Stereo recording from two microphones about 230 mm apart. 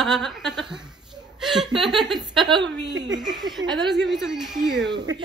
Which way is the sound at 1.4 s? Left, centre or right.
Centre.